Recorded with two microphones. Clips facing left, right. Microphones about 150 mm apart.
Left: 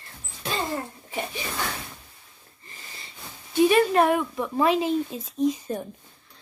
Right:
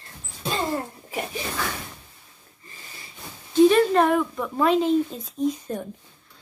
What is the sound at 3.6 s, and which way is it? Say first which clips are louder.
A woman's voice: right 2 dB; 10° left (ahead or behind).